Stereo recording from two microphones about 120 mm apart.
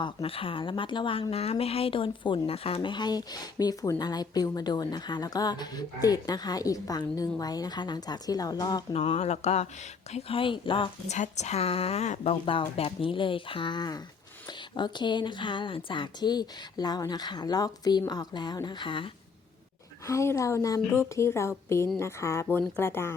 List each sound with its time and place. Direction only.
0.0 s speech: 50° left (ahead or behind); by 8.8 s 30° left (ahead or behind)
8.9 s a woman's voice: 55° left (ahead or behind)
11.1 s a woman's voice: 75° left (ahead or behind); by 19.1 s 45° left (ahead or behind)
20.1 s a woman's voice: 25° left (ahead or behind)